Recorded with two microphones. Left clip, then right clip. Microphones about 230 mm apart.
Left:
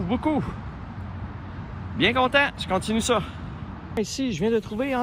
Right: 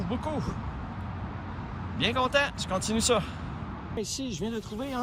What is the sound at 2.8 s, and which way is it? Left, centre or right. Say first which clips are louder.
Speech: right 1 dB; right.